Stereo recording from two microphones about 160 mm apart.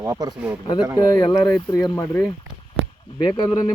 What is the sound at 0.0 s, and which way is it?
Speech, 20° right (ahead or behind).